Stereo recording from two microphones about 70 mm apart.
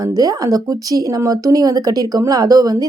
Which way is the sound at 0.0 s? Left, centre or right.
Right.